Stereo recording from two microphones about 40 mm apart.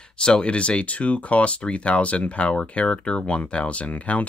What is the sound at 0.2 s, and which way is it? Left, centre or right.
Speech, left.